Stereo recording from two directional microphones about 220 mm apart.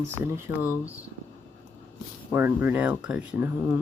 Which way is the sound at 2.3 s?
10° right (ahead or behind).